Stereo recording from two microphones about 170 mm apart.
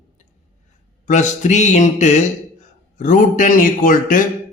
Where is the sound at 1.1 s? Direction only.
45° left (ahead or behind).